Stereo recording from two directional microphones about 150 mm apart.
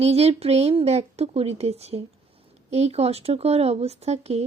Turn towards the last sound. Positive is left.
turn(degrees=-45)  # may be behind; listen again after turning